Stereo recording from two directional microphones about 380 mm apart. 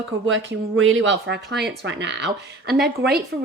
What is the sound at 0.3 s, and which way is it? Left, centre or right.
A woman's voice, right.